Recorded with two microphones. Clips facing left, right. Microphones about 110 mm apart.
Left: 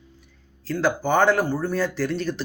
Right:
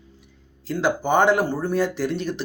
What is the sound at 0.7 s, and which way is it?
Speech, 20° right (ahead or behind).